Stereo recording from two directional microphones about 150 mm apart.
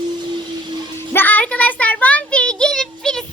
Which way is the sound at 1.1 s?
10° left (ahead or behind).